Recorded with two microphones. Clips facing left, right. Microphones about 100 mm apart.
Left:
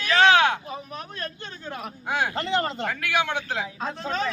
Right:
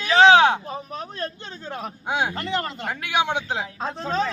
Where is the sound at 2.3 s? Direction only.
30° left (ahead or behind).